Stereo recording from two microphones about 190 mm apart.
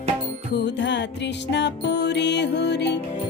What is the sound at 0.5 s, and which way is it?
Music, 65° left (ahead or behind).